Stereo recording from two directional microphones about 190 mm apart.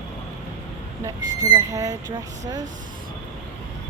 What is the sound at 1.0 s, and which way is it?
Speech, 20° right (ahead or behind).